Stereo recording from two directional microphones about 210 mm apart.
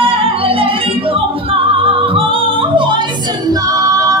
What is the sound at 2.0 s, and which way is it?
Yodeling, 25° right (ahead or behind).